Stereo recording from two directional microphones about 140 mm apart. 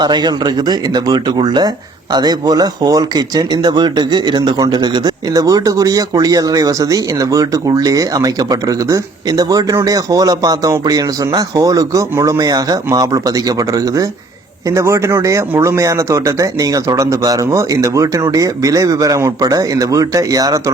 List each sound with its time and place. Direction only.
0.0 s speech: 30° right (ahead or behind)